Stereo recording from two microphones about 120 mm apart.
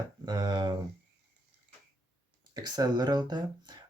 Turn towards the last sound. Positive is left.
turn(degrees=-35)  # may be behind; listen again after turning